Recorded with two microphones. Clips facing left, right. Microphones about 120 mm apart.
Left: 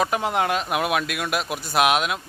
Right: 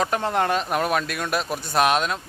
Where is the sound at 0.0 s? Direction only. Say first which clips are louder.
Even; 10° left (ahead or behind).